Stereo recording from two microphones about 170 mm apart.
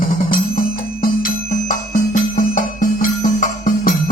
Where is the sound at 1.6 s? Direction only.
50° left (ahead or behind).